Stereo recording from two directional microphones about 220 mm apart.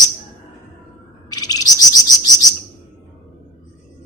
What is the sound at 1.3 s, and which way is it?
Chirp, 15° left (ahead or behind).